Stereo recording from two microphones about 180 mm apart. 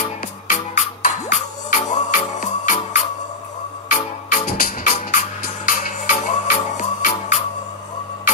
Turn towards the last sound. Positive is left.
turn(degrees=45)  # may be behind; listen again after turning